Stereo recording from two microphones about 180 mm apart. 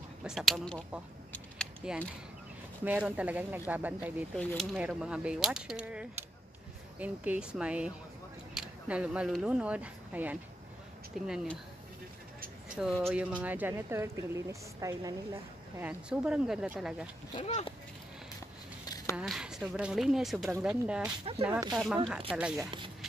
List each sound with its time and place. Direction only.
0.2 s a woman's voice: centre (ahead or behind)
4.4 s speech: 5° left (ahead or behind)
4.7 s a woman's voice: 5° right (ahead or behind)
12.8 s a woman's voice: 5° right (ahead or behind)
17.4 s speech: 35° left (ahead or behind)
18.9 s a sound: 20° left (ahead or behind)
19.1 s speech: 5° right (ahead or behind)
21.4 s a woman's voice: 15° right (ahead or behind)
21.7 s speech: centre (ahead or behind)